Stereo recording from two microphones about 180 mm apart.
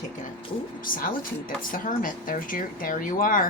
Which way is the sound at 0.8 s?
50° left (ahead or behind).